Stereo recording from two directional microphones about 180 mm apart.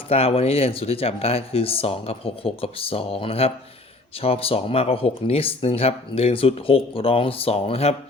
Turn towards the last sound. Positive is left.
turn(degrees=35)  # may be behind; listen again after turning